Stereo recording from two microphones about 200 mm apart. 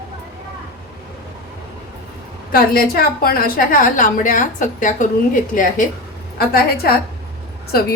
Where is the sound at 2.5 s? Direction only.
45° left (ahead or behind).